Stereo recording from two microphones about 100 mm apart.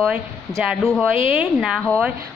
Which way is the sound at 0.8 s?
5° left (ahead or behind).